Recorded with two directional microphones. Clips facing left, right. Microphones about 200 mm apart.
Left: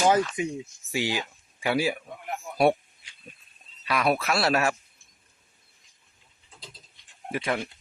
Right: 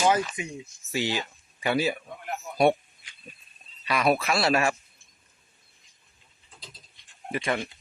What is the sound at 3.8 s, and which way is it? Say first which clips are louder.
Speech: right 1 dB; centre (ahead or behind).